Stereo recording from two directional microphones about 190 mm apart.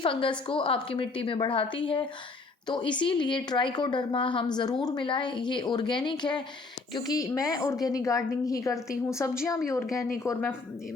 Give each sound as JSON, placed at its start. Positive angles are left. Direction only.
{"t": 0.0, "sound": "a woman's voice", "side_deg": 25}